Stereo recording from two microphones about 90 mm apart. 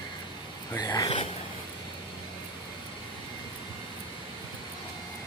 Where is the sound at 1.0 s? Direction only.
65° left (ahead or behind).